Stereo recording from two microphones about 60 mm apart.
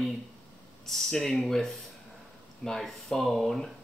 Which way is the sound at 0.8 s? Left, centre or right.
Centre.